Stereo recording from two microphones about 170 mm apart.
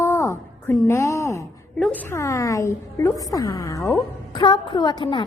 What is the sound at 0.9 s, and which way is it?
A woman's voice, 15° left (ahead or behind).